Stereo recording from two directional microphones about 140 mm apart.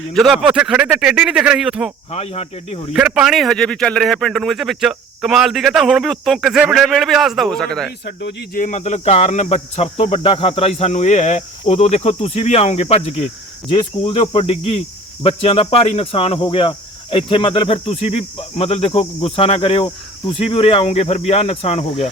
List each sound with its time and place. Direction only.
0.1 s a man's voice: centre (ahead or behind)
2.0 s cricket: 50° left (ahead or behind)
2.9 s a man's voice: 5° right (ahead or behind)
8.5 s cricket: 65° left (ahead or behind); by 22.1 s 50° left (ahead or behind)